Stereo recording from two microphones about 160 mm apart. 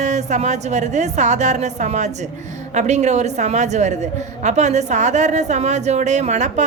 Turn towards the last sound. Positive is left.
turn(degrees=-45)  # may be behind; listen again after turning